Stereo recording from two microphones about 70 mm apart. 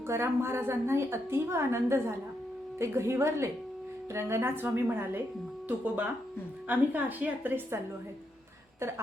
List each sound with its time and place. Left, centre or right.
0.1 s a woman's voice: right